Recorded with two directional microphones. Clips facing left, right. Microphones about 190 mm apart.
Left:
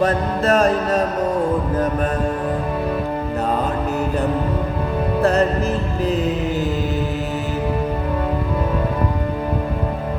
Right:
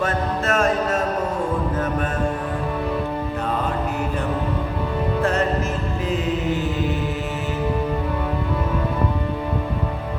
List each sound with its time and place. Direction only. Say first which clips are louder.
0.0 s mantra: left 4 dB; 35° left (ahead or behind)